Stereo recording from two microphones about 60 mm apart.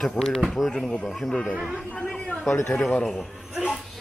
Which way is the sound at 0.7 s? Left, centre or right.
Centre.